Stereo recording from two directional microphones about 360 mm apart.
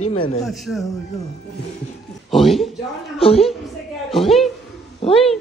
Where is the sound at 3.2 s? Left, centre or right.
Centre.